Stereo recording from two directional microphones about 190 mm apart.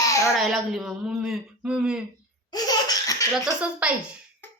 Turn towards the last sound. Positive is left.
turn(degrees=-5)  # may be behind; listen again after turning